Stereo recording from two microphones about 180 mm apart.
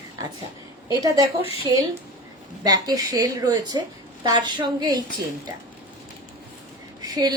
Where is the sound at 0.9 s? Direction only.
20° right (ahead or behind).